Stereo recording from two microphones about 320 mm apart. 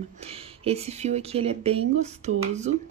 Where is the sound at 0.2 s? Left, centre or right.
Centre.